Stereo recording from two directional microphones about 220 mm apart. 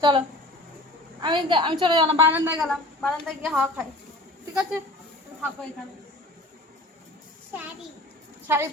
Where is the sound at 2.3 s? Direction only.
10° right (ahead or behind).